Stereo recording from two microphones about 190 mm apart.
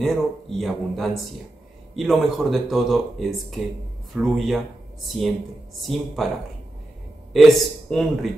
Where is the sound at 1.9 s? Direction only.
Centre (ahead or behind).